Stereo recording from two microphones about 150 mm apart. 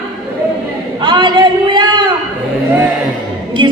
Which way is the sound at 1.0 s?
30° right (ahead or behind).